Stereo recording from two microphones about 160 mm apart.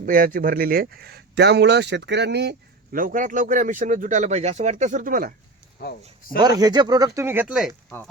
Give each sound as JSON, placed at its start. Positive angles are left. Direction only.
{"t": 0.0, "sound": "speech", "side_deg": -60}
{"t": 6.4, "sound": "speech", "side_deg": -25}
{"t": 7.4, "sound": "speech", "side_deg": -5}